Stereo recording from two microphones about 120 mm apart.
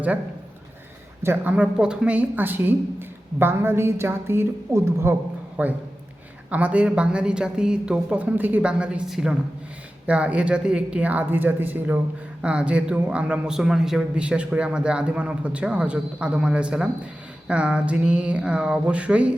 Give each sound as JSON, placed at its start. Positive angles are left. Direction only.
{"t": 1.2, "sound": "a man's voice", "side_deg": -15}